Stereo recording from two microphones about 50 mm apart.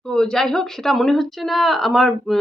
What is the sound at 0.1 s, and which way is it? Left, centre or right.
A woman's voice, centre.